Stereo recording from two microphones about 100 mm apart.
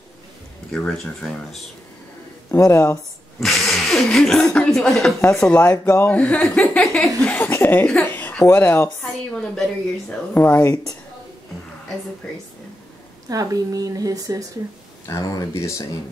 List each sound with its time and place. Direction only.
0.7 s a woman's voice: 5° left (ahead or behind)
2.6 s speech: 35° left (ahead or behind)
3.3 s a sound: centre (ahead or behind)
4.6 s a woman's voice: 5° left (ahead or behind); by 7.9 s 20° left (ahead or behind)
8.1 s a sound: 20° left (ahead or behind)
8.5 s speech: 20° left (ahead or behind)
9.0 s a woman's voice: 5° left (ahead or behind)
13.3 s a woman's voice: 35° right (ahead or behind)
15.0 s speech: 30° left (ahead or behind)